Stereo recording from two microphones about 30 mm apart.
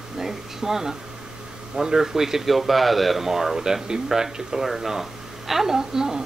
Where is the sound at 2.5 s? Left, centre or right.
Centre.